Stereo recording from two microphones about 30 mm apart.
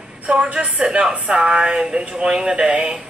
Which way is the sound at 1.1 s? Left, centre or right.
Right.